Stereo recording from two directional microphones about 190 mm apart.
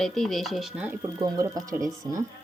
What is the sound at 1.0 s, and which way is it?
Speech, 20° right (ahead or behind).